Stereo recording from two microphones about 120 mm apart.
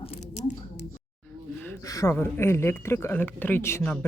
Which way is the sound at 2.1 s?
20° left (ahead or behind).